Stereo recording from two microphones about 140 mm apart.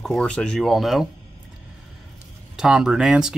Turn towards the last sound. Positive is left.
turn(degrees=-5)  # may be behind; listen again after turning